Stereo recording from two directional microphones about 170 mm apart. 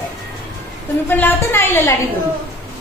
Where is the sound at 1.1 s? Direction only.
10° left (ahead or behind).